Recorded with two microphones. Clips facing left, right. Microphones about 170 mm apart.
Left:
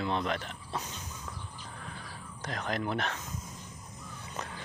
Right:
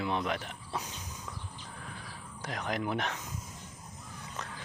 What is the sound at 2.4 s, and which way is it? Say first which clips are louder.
Speech: even; 10° right (ahead or behind).